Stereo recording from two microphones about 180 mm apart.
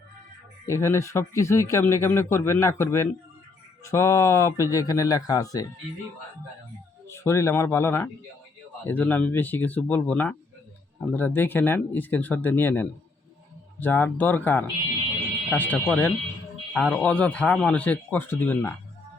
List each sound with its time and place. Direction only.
0.7 s speech: 15° left (ahead or behind)
7.1 s speech: 15° left (ahead or behind)